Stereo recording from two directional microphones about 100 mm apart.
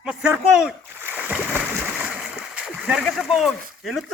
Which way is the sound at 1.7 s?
5° right (ahead or behind).